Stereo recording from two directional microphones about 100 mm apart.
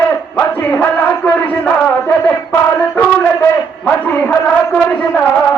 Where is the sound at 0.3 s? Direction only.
20° left (ahead or behind).